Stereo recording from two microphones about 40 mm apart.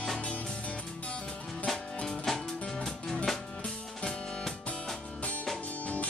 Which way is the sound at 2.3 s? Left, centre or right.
Centre.